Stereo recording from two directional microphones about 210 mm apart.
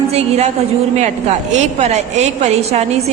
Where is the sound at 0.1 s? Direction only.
30° right (ahead or behind).